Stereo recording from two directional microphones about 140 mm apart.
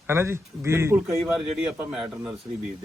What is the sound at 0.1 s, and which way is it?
Speech, 20° right (ahead or behind).